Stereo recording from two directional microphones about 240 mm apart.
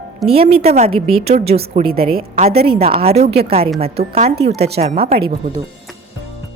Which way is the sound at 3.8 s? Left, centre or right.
Right.